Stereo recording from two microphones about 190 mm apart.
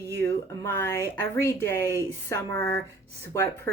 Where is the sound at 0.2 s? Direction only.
10° left (ahead or behind).